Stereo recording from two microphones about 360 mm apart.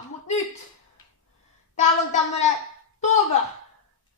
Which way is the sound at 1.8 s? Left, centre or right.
Centre.